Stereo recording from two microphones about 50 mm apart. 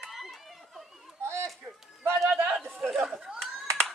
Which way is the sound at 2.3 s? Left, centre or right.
Centre.